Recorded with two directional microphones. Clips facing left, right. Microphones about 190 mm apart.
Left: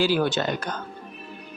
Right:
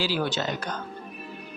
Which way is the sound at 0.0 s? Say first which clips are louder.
Left 5 dB; 50° left (ahead or behind).